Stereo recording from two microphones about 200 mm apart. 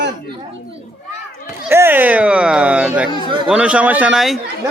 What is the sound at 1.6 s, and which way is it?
A man's voice, 10° right (ahead or behind).